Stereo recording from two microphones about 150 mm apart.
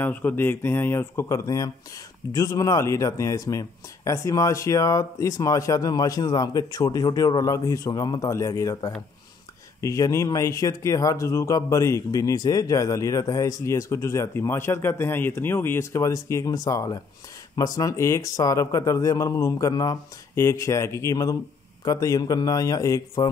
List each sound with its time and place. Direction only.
0.0 s speech: 10° left (ahead or behind)